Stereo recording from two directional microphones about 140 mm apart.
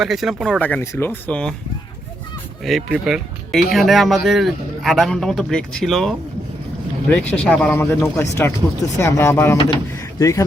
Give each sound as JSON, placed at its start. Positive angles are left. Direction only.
{"t": 0.0, "sound": "speech", "side_deg": 0}
{"t": 0.6, "sound": "speech", "side_deg": 15}
{"t": 2.6, "sound": "speech", "side_deg": 0}